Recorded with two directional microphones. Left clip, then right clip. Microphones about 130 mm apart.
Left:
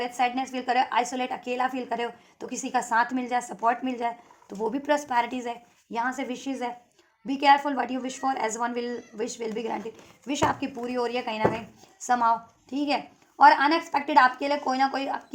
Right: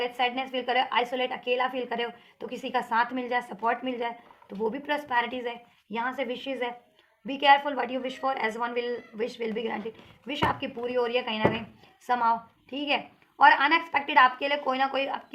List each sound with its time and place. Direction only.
0.2 s a woman's voice: 40° left (ahead or behind)